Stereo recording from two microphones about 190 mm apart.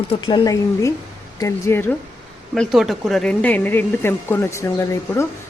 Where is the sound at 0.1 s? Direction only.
25° left (ahead or behind).